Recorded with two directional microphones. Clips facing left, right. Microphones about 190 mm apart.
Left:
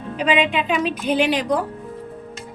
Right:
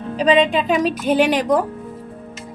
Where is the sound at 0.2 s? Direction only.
35° right (ahead or behind).